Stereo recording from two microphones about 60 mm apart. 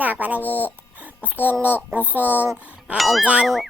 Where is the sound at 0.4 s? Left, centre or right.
Left.